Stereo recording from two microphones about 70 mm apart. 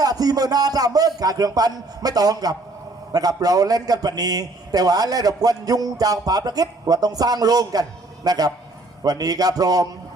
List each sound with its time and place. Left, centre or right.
0.0 s a man's voice: right